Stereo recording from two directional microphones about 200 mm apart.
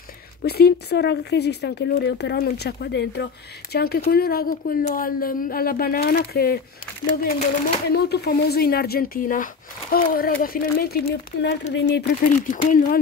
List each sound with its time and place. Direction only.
0.4 s speech: 50° left (ahead or behind)
7.9 s speech: 50° left (ahead or behind)
12.3 s speech: 40° left (ahead or behind)